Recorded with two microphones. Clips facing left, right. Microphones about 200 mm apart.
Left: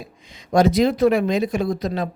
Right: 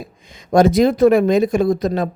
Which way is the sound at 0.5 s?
50° right (ahead or behind).